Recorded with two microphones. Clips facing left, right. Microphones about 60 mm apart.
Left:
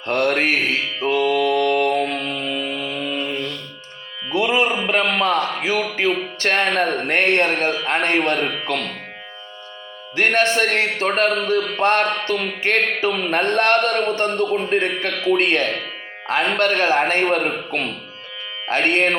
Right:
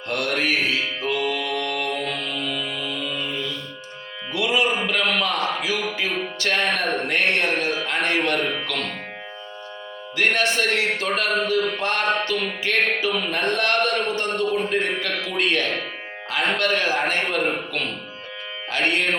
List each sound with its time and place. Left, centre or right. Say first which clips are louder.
0.1 s speech: left 5 dB; left
1.0 s mantra: left 10 dB; left
3.2 s music: left 3 dB; left
4.3 s music: left 3 dB; left
5.0 s a sound: left 3 dB; left
6.0 s music: left 5 dB; left
7.9 s speech: left 4 dB; left
10.2 s speech: left 3 dB; left
11.8 s a sound: left 7 dB; left
12.3 s speech: left 3 dB; left